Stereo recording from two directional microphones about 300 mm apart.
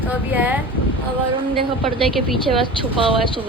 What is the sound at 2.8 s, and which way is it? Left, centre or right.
Speech, centre.